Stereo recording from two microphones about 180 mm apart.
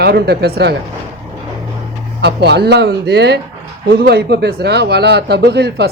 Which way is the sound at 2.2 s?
65° right (ahead or behind).